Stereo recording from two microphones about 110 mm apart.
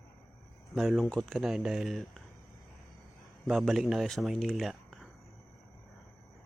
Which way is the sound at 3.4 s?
Centre (ahead or behind).